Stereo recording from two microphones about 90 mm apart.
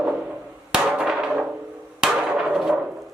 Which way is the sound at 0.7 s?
5° right (ahead or behind).